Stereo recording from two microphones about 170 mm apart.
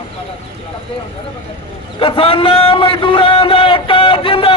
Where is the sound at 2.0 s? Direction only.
30° left (ahead or behind).